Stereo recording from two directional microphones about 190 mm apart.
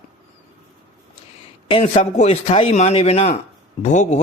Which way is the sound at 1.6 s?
30° left (ahead or behind).